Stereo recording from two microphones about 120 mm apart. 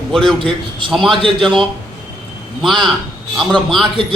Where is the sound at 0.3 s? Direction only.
45° right (ahead or behind).